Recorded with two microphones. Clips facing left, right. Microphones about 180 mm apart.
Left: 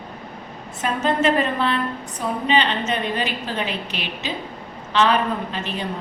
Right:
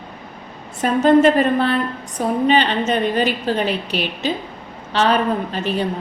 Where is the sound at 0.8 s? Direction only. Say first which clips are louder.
Right 8 dB; 45° right (ahead or behind).